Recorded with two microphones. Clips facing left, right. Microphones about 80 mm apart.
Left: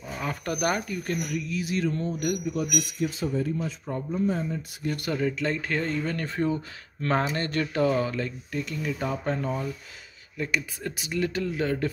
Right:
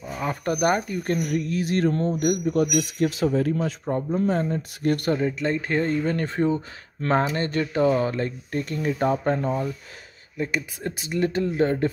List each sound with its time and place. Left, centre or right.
0.2 s speech: right
1.3 s speech: right
2.0 s speech: right
2.5 s speech: right
3.8 s speech: right
4.3 s speech: right
5.1 s speech: right